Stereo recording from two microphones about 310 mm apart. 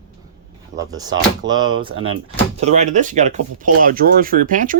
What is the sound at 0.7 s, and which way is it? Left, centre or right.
Speech, centre.